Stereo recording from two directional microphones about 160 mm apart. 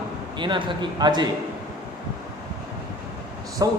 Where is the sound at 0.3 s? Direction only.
30° right (ahead or behind).